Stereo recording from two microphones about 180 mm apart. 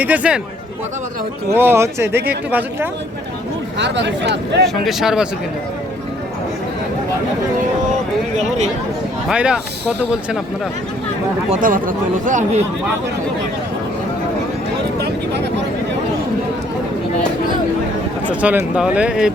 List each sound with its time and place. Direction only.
0.0 s speech: 10° right (ahead or behind)
1.5 s speech: 15° right (ahead or behind)
3.8 s speech: 80° right
4.6 s speech: centre (ahead or behind)
8.4 s speech: 40° right (ahead or behind)
9.3 s speech: 5° right (ahead or behind)
11.5 s speech: 50° right (ahead or behind)
18.3 s speech: 10° right (ahead or behind)